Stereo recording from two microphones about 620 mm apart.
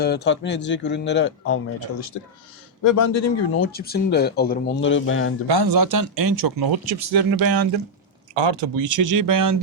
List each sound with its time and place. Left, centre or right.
0.0 s speech: centre
5.5 s speech: right